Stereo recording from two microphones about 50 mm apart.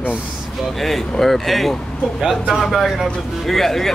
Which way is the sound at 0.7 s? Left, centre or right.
Centre.